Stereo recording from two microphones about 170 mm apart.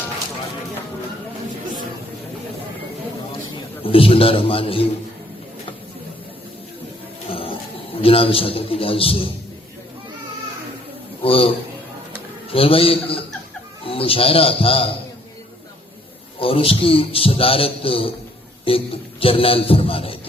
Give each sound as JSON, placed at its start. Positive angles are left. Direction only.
{"t": 3.8, "sound": "a man's voice", "side_deg": 30}
{"t": 7.3, "sound": "a sound", "side_deg": 35}
{"t": 8.0, "sound": "a man's voice", "side_deg": 35}
{"t": 11.2, "sound": "a man's voice", "side_deg": 35}
{"t": 16.4, "sound": "a man's voice", "side_deg": 35}